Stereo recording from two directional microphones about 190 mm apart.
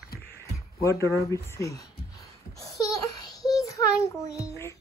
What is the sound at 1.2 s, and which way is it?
Speech, 15° left (ahead or behind).